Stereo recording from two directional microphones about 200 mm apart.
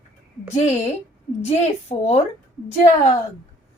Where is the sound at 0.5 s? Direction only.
35° left (ahead or behind).